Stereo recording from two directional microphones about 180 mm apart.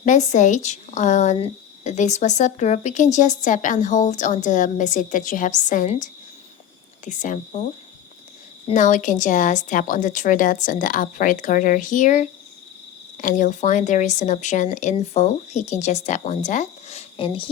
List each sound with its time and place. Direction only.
0.0 s speech: 40° left (ahead or behind)
8.7 s speech: 45° left (ahead or behind); by 17.5 s 25° left (ahead or behind)